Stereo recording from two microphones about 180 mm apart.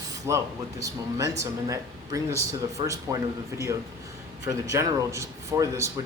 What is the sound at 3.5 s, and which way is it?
Speech, 15° right (ahead or behind).